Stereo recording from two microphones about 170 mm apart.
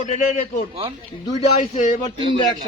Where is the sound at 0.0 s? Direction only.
45° left (ahead or behind).